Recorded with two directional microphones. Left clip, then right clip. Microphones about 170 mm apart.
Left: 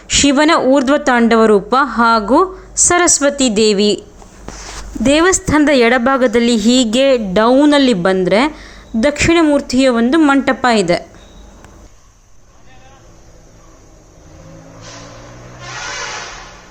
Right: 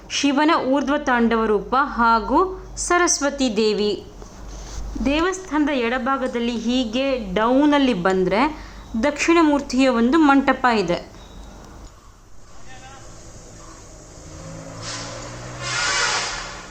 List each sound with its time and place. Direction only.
0.1 s a woman's voice: 30° left (ahead or behind)
5.0 s a woman's voice: 35° left (ahead or behind); by 10.3 s 20° left (ahead or behind)
10.3 s a woman's voice: 30° left (ahead or behind)